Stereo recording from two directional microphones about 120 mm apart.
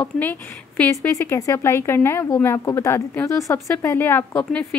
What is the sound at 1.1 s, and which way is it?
Speech, 25° left (ahead or behind).